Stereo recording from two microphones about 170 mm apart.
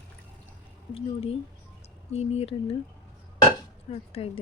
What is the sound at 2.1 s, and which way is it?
Speech, 35° left (ahead or behind).